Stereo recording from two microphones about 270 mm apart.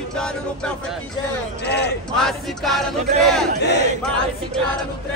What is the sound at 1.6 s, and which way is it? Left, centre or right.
Speech, left.